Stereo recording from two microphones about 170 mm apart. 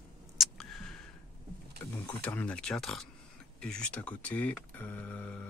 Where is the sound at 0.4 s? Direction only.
Centre (ahead or behind).